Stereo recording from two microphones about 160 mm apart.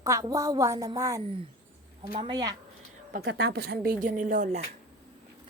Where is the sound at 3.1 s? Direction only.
75° right (ahead or behind); by 4.6 s 50° right (ahead or behind).